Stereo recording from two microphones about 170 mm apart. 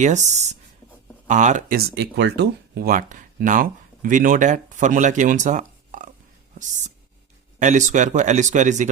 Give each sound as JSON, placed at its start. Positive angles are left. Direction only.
{"t": 0.0, "sound": "speech", "side_deg": -45}
{"t": 1.7, "sound": "speech", "side_deg": -80}